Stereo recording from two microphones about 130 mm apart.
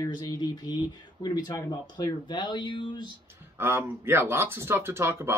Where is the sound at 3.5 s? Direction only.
15° right (ahead or behind).